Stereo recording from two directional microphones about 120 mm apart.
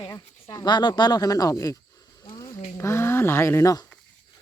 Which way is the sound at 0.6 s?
35° left (ahead or behind).